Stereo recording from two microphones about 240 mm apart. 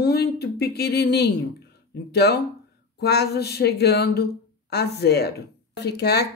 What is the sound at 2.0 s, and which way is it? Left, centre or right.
Speech, left.